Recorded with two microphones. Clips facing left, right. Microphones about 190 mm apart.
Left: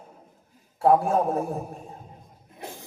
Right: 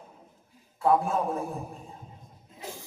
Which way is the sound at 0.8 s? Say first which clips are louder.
Left 4 dB; 40° left (ahead or behind).